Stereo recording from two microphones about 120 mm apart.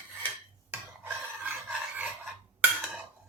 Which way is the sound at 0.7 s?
15° right (ahead or behind).